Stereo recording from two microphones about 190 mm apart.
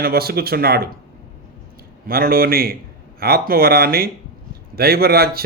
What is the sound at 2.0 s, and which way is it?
A man's voice, 50° right (ahead or behind).